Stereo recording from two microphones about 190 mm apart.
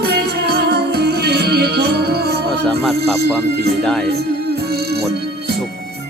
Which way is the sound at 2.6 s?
Centre (ahead or behind).